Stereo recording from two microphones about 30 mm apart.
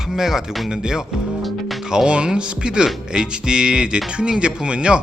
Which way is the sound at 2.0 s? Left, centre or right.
Right.